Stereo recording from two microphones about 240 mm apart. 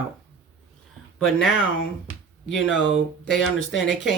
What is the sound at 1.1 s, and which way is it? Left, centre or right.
Speech, centre.